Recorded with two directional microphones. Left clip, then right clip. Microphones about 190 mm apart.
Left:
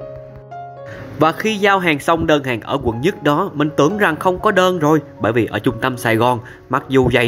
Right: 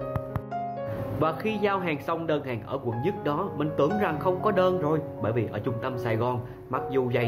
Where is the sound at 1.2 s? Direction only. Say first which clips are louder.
Left 12 dB; 40° left (ahead or behind).